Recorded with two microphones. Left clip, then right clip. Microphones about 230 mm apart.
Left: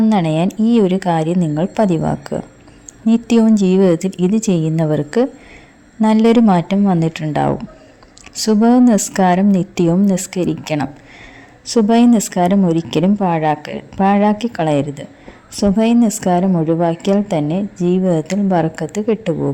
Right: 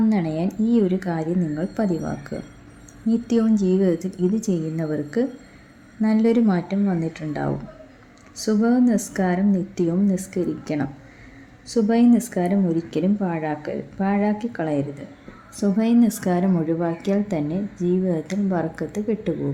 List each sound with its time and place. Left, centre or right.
0.1 s a woman's voice: left